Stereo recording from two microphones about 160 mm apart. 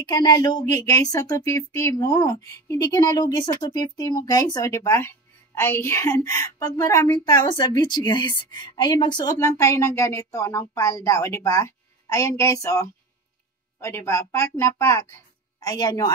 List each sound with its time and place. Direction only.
0.0 s speech: 25° left (ahead or behind)